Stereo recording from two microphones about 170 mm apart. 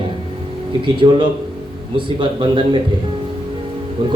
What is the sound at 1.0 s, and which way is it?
A man's voice, 30° right (ahead or behind).